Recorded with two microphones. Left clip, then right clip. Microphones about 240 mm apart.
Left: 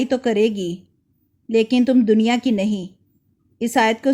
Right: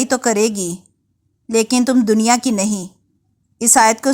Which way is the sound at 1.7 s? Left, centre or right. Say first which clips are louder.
Right 1 dB; centre.